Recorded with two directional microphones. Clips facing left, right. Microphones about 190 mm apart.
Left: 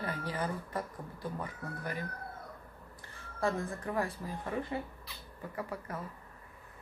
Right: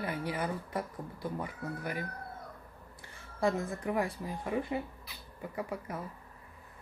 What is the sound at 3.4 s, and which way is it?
Speech, 15° right (ahead or behind).